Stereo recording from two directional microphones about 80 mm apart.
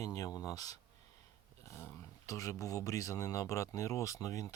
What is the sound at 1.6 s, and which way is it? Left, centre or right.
Speech, left.